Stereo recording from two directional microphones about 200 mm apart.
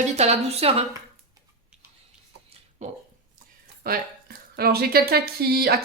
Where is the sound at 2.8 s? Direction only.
35° right (ahead or behind).